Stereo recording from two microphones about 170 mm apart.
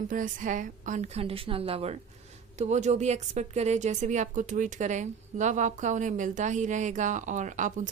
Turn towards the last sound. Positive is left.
turn(degrees=-50)  # may be behind; listen again after turning